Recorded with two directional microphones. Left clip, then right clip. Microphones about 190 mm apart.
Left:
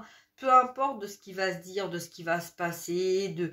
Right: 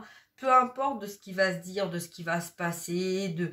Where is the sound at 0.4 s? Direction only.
30° left (ahead or behind).